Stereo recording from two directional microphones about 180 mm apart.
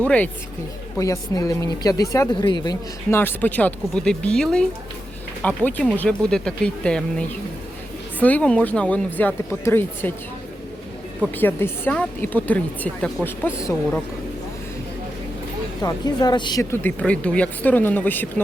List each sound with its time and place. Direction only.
0.9 s speech: 20° left (ahead or behind)
11.3 s speech: 10° left (ahead or behind)
15.8 s speech: 20° left (ahead or behind)
16.7 s speech: 10° left (ahead or behind)